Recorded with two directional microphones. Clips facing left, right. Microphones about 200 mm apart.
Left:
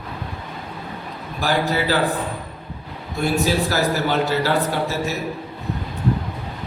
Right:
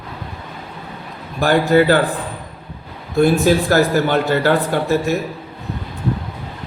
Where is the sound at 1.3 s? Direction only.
55° right (ahead or behind).